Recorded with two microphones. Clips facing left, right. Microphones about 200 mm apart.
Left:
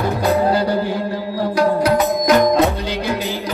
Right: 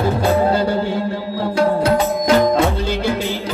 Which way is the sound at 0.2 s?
30° right (ahead or behind).